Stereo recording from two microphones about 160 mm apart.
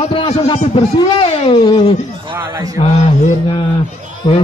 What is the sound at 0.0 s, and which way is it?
Speech, 35° left (ahead or behind).